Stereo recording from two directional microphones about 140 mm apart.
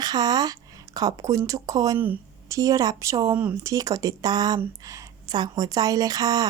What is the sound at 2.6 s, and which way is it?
Speech, 25° right (ahead or behind).